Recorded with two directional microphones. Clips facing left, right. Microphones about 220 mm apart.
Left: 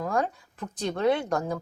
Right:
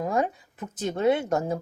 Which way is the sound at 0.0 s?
20° right (ahead or behind).